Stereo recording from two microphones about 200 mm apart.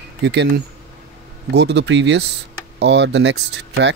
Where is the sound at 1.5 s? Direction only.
60° right (ahead or behind).